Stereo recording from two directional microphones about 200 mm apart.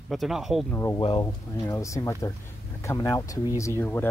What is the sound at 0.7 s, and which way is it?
Speech, 10° left (ahead or behind).